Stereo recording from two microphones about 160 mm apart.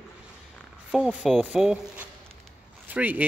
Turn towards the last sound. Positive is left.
turn(degrees=-10)  # may be behind; listen again after turning